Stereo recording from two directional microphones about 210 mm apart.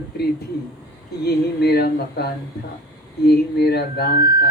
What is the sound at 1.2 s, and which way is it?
A woman's voice, 50° left (ahead or behind).